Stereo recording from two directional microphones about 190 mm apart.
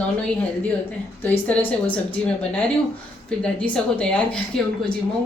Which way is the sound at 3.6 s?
5° left (ahead or behind).